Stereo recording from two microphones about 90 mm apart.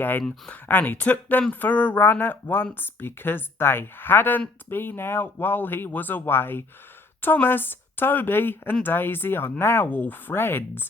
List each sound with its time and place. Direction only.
0.2 s a woman's voice: 10° left (ahead or behind); by 10.8 s 25° left (ahead or behind)